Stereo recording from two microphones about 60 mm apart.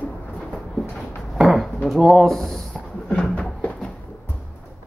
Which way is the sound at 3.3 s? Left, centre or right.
Centre.